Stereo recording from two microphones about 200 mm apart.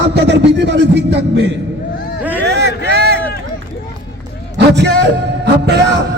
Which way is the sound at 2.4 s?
55° right (ahead or behind).